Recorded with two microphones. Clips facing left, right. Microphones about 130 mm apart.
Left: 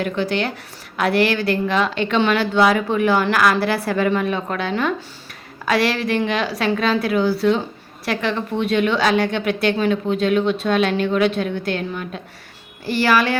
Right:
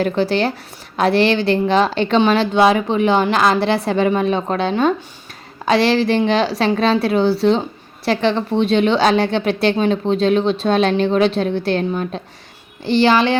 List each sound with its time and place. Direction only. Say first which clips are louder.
0.0 s a woman's voice: right 4 dB; 30° right (ahead or behind)